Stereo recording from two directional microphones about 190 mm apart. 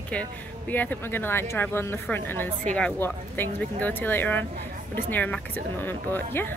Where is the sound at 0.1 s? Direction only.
10° left (ahead or behind).